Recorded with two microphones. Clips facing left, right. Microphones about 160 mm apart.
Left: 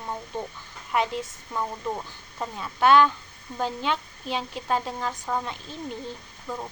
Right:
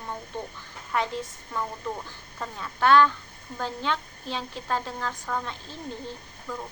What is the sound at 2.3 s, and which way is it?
A woman's voice, 15° left (ahead or behind).